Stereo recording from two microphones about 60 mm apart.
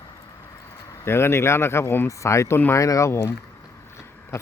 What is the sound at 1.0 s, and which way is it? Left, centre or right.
Speech, left.